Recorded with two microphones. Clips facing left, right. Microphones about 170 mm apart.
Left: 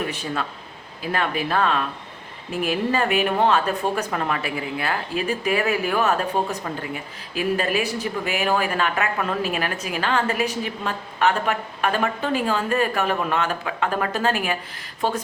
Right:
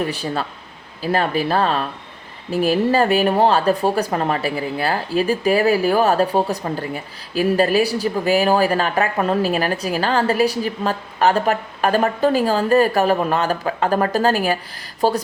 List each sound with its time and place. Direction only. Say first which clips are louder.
0.1 s speech: right 4 dB; 35° right (ahead or behind)